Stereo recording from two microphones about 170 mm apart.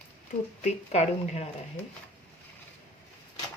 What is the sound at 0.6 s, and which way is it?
Speech, 40° left (ahead or behind).